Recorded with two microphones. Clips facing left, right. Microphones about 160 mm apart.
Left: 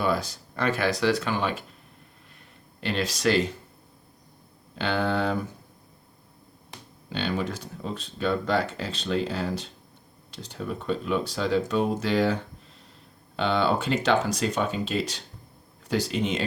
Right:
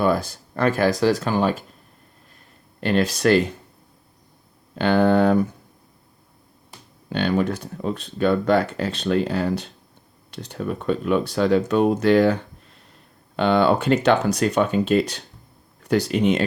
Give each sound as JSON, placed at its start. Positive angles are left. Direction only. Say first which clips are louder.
{"t": 0.0, "sound": "speech", "louder": "right 6 dB", "side_deg": -50}
{"t": 2.8, "sound": "speech", "louder": "right 6 dB", "side_deg": -55}
{"t": 4.7, "sound": "speech", "louder": "right 9 dB", "side_deg": -50}
{"t": 7.1, "sound": "speech", "louder": "right 7 dB", "side_deg": -55}